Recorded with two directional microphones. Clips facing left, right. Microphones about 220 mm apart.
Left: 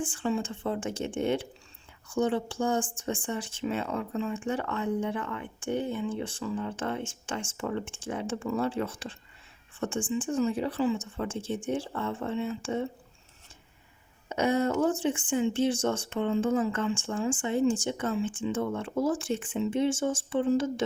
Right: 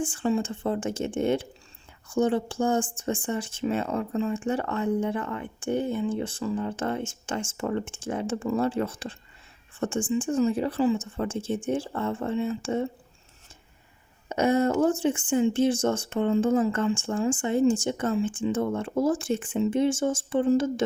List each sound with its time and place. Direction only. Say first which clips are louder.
0.0 s speech: right 4 dB; 40° right (ahead or behind)
14.3 s speech: right 3 dB; 45° right (ahead or behind)